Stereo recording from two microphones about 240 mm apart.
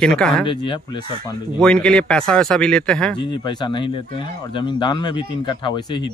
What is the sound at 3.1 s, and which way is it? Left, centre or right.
Speech, centre.